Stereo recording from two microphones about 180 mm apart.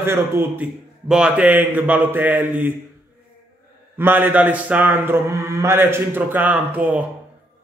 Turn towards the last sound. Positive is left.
turn(degrees=-5)  # may be behind; listen again after turning